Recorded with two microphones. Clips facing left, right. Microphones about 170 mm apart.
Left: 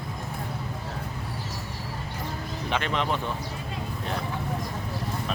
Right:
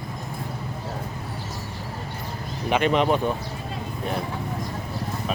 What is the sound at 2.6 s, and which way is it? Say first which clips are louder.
Speech: right 8 dB; 15° right (ahead or behind).